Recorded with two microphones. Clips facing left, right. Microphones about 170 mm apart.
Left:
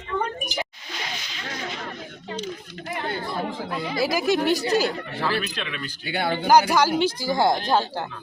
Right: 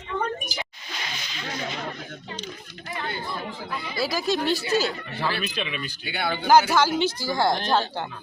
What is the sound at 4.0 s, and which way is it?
Speech, 20° left (ahead or behind).